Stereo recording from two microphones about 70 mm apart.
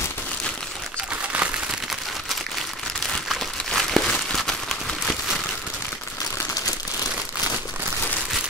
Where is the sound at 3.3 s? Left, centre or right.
Centre.